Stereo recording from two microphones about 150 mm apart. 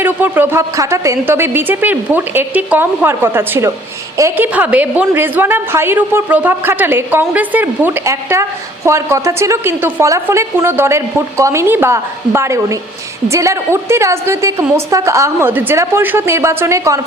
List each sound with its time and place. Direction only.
0.0 s a woman's voice: 10° right (ahead or behind)